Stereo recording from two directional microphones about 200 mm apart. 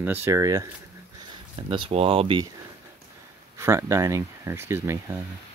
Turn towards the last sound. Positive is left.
turn(degrees=-15)  # may be behind; listen again after turning